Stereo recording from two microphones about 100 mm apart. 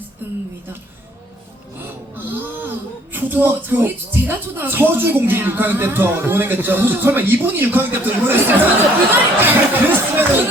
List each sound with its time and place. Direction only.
2.1 s gasp: 20° right (ahead or behind)
3.1 s speech: 20° right (ahead or behind)